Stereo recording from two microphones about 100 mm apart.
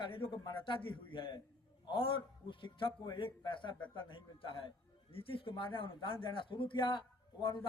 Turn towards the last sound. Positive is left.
turn(degrees=55)  # may be behind; listen again after turning